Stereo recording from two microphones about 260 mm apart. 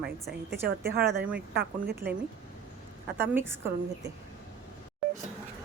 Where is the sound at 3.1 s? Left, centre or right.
Centre.